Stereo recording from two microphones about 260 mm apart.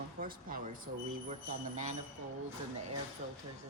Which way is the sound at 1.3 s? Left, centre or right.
Right.